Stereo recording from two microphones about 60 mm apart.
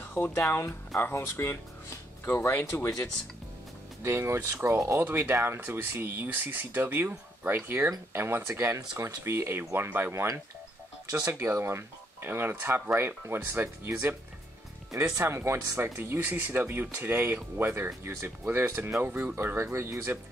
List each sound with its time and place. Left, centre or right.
0.1 s speech: left
2.7 s speech: left
4.0 s speech: right
5.1 s speech: right
10.1 s speech: right
15.1 s speech: right
15.8 s speech: right